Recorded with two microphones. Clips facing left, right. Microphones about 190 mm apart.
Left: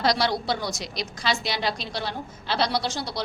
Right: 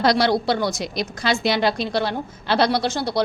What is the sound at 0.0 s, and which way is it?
A woman's voice, 55° right (ahead or behind).